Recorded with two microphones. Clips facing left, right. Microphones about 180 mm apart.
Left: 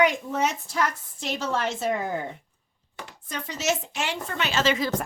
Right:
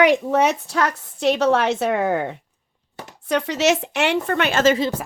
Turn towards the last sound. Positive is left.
turn(degrees=-50)  # may be behind; listen again after turning